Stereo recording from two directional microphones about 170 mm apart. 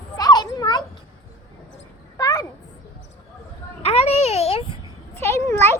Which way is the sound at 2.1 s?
20° left (ahead or behind).